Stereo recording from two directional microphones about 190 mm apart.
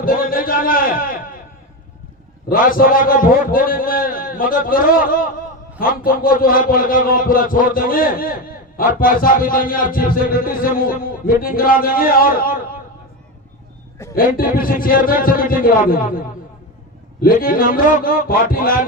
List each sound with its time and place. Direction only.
0.0 s a man's voice: 50° left (ahead or behind)
2.5 s a man's voice: 50° left (ahead or behind)
14.2 s a man's voice: 50° left (ahead or behind)